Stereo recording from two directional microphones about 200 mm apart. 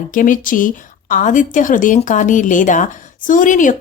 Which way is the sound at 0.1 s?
40° left (ahead or behind).